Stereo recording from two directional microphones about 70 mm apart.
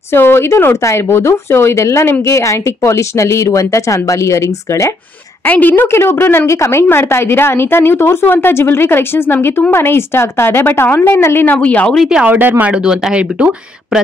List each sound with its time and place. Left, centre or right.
0.1 s a woman's voice: left
5.4 s a woman's voice: left
11.6 s speech: centre
12.3 s speech: right